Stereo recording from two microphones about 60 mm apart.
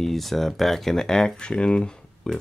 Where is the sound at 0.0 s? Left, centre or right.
Centre.